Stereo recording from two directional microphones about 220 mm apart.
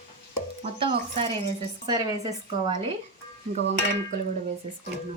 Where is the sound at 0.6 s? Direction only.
25° right (ahead or behind).